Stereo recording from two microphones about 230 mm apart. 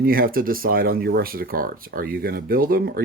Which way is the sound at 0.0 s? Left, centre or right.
Right.